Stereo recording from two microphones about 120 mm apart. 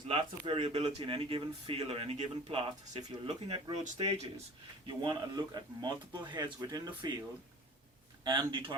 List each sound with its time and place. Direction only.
0.1 s speech: 50° right (ahead or behind)
4.9 s speech: 35° right (ahead or behind)
8.2 s speech: 40° right (ahead or behind)